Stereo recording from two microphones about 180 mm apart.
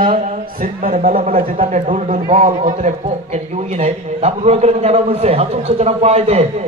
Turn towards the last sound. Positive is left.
turn(degrees=-35)  # may be behind; listen again after turning